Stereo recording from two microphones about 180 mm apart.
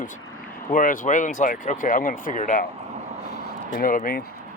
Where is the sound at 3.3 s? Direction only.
50° left (ahead or behind).